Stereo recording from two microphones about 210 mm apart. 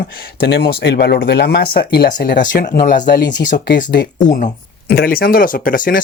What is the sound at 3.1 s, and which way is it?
Speech, 50° left (ahead or behind).